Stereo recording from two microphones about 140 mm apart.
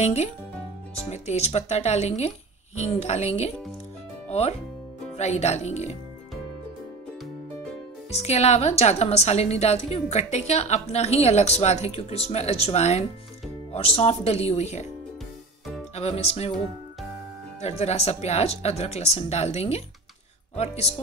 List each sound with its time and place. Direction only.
0.0 s a woman's voice: 50° left (ahead or behind)
8.2 s a woman's voice: 50° left (ahead or behind)
15.9 s a woman's voice: 50° left (ahead or behind)
17.6 s a woman's voice: 50° left (ahead or behind)